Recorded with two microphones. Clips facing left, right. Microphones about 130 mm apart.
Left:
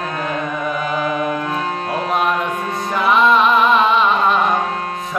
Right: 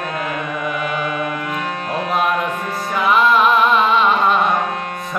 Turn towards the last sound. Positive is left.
turn(degrees=0)  # may be behind; listen again after turning